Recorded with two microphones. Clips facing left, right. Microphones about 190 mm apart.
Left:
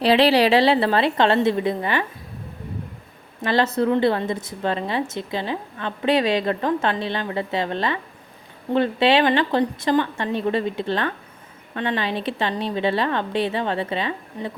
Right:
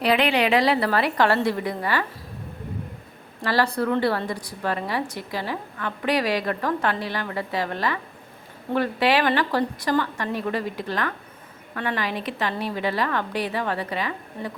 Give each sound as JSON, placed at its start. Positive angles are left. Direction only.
{"t": 0.0, "sound": "a woman's voice", "side_deg": 30}
{"t": 3.4, "sound": "a woman's voice", "side_deg": 20}